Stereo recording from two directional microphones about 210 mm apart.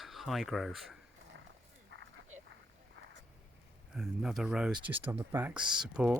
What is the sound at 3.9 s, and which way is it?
Speech, centre (ahead or behind).